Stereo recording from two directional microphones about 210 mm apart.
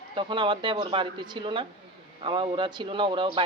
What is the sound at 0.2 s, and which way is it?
A man's voice, 25° right (ahead or behind).